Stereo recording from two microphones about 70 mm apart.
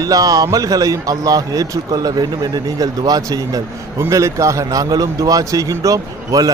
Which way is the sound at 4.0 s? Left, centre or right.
Right.